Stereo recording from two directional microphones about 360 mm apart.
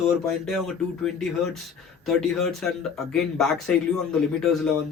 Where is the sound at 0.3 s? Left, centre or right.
Centre.